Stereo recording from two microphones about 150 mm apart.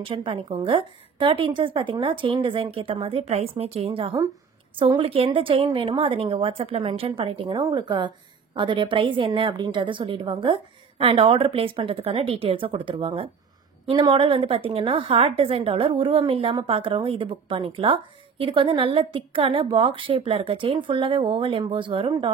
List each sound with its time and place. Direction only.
0.0 s a woman's voice: 35° right (ahead or behind)